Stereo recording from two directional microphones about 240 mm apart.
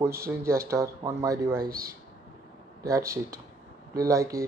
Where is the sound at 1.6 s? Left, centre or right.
Right.